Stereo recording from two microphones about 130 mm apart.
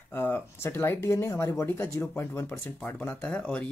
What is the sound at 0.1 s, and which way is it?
Speech, 15° left (ahead or behind).